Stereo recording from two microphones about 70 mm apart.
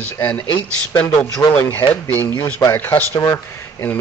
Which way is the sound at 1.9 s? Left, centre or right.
Left.